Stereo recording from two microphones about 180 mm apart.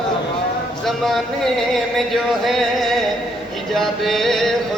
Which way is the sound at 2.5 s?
Centre (ahead or behind).